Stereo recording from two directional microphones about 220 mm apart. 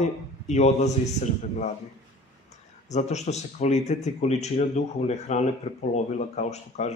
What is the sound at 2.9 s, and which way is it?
Speech, 30° left (ahead or behind).